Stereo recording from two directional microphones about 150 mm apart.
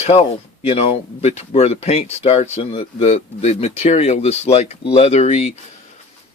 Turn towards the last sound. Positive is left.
turn(degrees=45)  # may be behind; listen again after turning